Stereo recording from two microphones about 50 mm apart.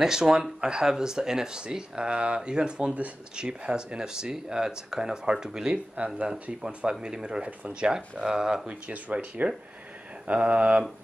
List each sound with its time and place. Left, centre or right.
0.0 s speech: centre
6.2 s speech: right
8.6 s speech: right